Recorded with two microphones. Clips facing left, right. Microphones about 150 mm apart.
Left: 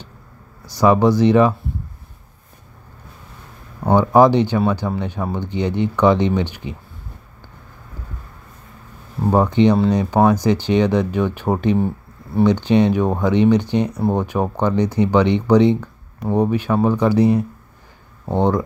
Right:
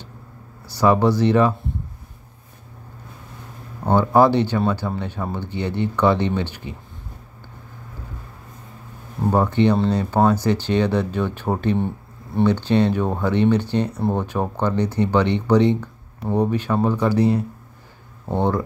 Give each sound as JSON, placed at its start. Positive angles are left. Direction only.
{"t": 0.7, "sound": "speech", "side_deg": 15}
{"t": 3.8, "sound": "speech", "side_deg": 15}
{"t": 9.3, "sound": "speech", "side_deg": 15}